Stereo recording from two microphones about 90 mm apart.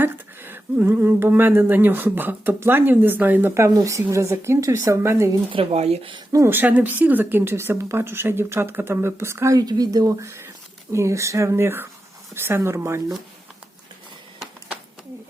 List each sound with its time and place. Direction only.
0.0 s speech: 25° right (ahead or behind)
5.5 s speech: 75° right (ahead or behind)
6.3 s speech: 25° right (ahead or behind)
9.6 s speech: 45° right (ahead or behind); by 13.0 s 30° right (ahead or behind)